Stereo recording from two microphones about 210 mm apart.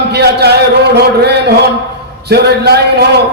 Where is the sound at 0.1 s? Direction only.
50° right (ahead or behind).